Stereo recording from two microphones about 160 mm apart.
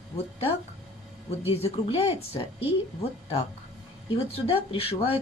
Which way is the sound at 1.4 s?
40° left (ahead or behind).